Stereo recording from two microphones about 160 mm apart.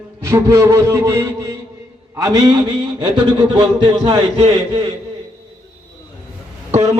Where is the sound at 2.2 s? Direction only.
25° right (ahead or behind).